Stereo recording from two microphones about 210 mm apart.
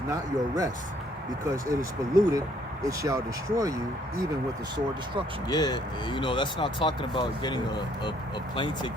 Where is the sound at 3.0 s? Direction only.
15° right (ahead or behind).